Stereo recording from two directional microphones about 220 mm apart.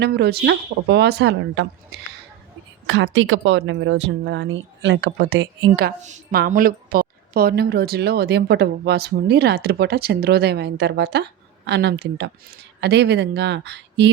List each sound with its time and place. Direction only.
0.0 s a woman's voice: 45° right (ahead or behind)
2.8 s a woman's voice: 60° right (ahead or behind)